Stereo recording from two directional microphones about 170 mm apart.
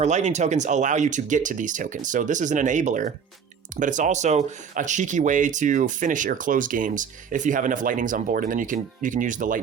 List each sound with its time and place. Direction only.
0.0 s speech: 45° right (ahead or behind)